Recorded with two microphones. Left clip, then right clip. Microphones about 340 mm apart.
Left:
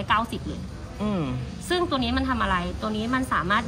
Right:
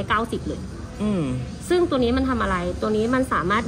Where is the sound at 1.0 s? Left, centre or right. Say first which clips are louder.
Right 3 dB; centre.